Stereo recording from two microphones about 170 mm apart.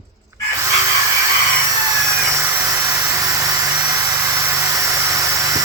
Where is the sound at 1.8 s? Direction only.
20° right (ahead or behind).